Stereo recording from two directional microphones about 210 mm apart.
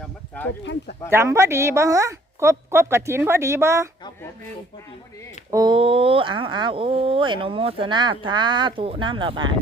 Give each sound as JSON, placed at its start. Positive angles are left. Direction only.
{"t": 0.0, "sound": "a sound", "side_deg": 5}
{"t": 0.6, "sound": "speech", "side_deg": 60}
{"t": 1.1, "sound": "a woman's voice", "side_deg": -15}
{"t": 5.5, "sound": "speech", "side_deg": -20}